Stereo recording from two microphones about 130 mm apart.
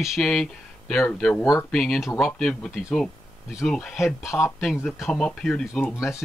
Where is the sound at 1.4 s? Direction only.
20° left (ahead or behind).